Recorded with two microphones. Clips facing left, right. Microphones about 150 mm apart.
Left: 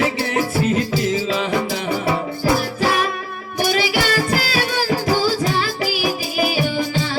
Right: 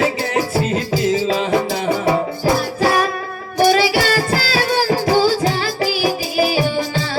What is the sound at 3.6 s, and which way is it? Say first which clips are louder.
Music: right 5 dB; 35° right (ahead or behind).